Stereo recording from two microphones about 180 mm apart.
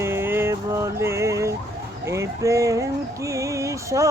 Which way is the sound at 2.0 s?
15° right (ahead or behind).